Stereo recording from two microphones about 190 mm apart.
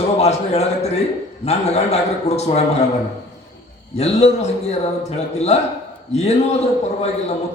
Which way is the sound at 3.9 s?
35° left (ahead or behind).